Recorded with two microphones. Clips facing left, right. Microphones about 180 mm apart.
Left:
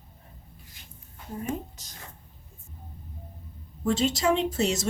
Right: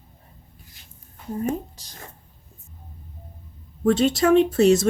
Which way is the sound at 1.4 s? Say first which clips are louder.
Right 5 dB; 35° right (ahead or behind).